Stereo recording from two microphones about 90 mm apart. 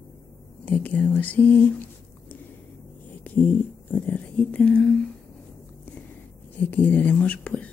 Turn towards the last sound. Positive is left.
turn(degrees=15)  # may be behind; listen again after turning